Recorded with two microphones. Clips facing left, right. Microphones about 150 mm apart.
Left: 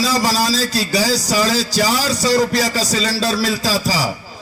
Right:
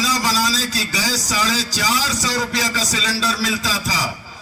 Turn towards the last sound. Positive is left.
turn(degrees=35)  # may be behind; listen again after turning